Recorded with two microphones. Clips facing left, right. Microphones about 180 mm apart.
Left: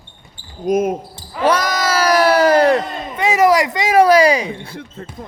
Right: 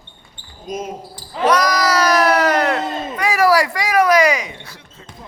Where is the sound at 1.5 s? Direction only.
25° left (ahead or behind).